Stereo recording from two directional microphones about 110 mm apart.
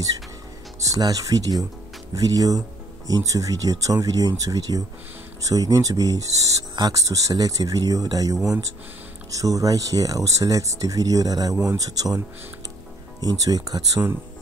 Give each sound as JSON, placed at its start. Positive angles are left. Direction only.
{"t": 0.7, "sound": "speech", "side_deg": -30}
{"t": 13.2, "sound": "speech", "side_deg": -35}